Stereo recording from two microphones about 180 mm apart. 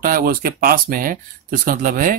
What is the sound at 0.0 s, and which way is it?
Speech, 50° right (ahead or behind).